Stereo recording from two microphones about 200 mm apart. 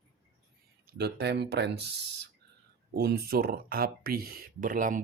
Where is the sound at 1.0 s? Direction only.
55° right (ahead or behind).